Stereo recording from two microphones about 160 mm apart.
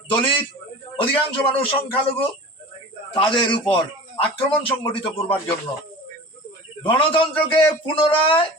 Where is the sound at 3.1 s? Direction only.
30° left (ahead or behind).